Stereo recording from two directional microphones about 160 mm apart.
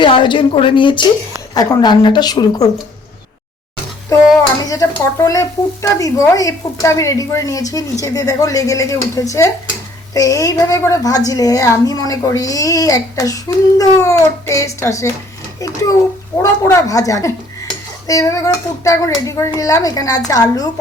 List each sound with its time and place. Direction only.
0.0 s a woman's voice: 30° left (ahead or behind)
4.4 s speech: 20° left (ahead or behind)